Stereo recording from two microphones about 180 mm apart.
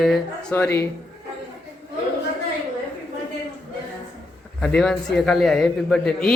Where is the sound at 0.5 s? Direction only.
15° left (ahead or behind).